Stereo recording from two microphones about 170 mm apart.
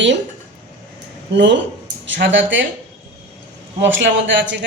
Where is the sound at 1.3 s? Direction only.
90° right.